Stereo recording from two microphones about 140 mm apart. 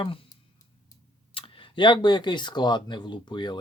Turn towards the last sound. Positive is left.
turn(degrees=35)  # may be behind; listen again after turning